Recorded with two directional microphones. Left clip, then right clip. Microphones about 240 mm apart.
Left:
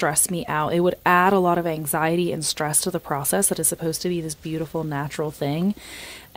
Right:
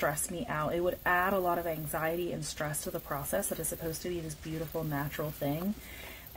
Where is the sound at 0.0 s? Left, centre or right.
Left.